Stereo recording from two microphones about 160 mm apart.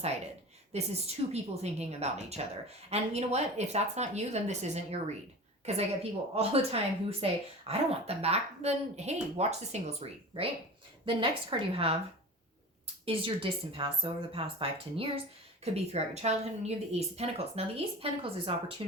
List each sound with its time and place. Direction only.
0.7 s a woman's voice: 40° right (ahead or behind)
13.1 s speech: 35° right (ahead or behind)